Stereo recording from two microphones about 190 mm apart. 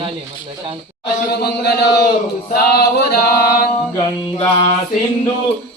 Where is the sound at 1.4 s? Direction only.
55° left (ahead or behind).